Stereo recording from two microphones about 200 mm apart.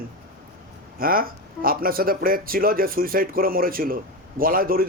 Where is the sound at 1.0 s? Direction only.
45° right (ahead or behind).